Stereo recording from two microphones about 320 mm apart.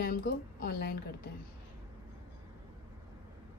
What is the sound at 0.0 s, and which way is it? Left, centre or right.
Speech, left.